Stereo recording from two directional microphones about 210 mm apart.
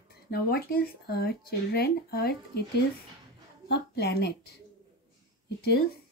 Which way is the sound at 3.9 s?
50° left (ahead or behind).